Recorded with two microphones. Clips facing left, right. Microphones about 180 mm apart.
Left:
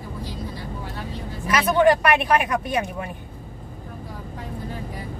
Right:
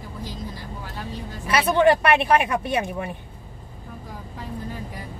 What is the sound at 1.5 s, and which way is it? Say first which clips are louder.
Speech: even; 30° right (ahead or behind).